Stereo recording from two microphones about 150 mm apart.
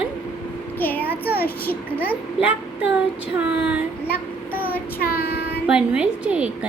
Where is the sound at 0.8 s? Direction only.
10° left (ahead or behind).